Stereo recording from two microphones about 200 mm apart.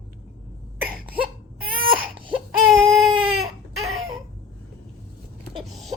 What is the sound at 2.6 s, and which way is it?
Baby cry, centre (ahead or behind).